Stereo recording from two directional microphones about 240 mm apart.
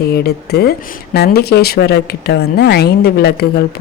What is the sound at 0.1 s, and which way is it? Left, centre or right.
Speech, left.